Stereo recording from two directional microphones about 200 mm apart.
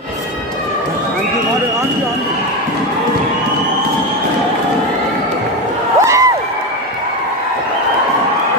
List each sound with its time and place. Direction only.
5.9 s crowd: 15° right (ahead or behind)